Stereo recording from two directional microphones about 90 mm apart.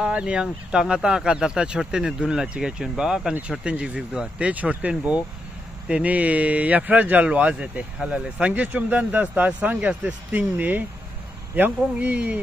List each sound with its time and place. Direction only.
0.0 s a man's voice: 10° right (ahead or behind)